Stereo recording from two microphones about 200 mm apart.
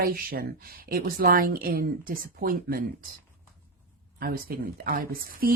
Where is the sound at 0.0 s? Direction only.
50° right (ahead or behind).